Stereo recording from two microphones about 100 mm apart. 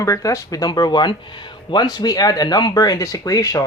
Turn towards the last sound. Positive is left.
turn(degrees=35)  # may be behind; listen again after turning